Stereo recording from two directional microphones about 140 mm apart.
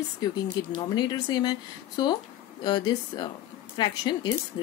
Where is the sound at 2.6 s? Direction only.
30° left (ahead or behind).